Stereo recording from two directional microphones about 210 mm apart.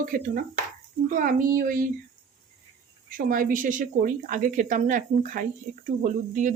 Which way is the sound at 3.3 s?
40° right (ahead or behind).